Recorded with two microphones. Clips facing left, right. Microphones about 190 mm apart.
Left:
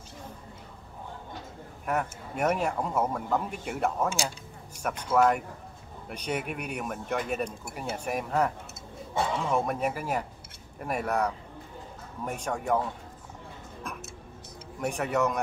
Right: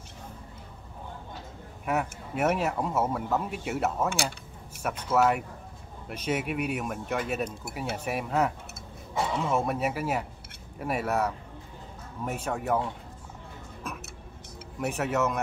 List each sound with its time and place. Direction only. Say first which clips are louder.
1.9 s speech: right 1 dB; 5° right (ahead or behind)
13.9 s tick-tock: right 2 dB; 5° right (ahead or behind)
14.8 s speech: even; 5° right (ahead or behind)